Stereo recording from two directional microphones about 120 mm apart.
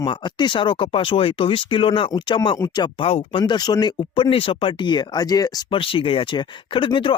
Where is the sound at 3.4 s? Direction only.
35° left (ahead or behind).